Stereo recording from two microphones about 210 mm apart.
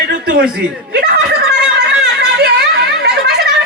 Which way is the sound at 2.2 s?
50° right (ahead or behind).